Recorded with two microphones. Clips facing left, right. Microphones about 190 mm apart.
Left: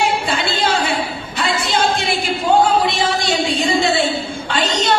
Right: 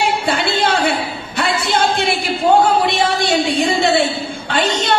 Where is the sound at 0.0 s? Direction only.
60° right (ahead or behind).